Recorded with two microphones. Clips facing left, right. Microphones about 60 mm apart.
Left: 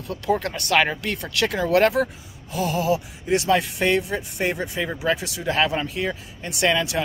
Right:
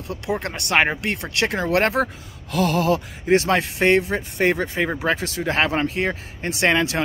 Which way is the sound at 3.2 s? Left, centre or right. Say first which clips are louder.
Right 2 dB; right.